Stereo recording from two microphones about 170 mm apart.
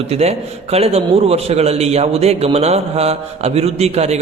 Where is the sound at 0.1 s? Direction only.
40° right (ahead or behind).